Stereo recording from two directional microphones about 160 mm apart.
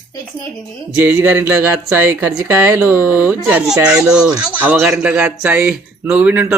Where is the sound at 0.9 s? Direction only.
10° right (ahead or behind).